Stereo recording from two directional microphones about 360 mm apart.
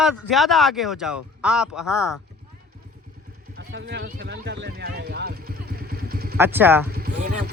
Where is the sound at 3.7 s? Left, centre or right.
Right.